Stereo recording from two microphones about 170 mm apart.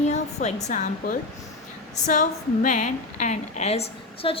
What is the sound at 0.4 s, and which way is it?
A woman's voice, 45° left (ahead or behind).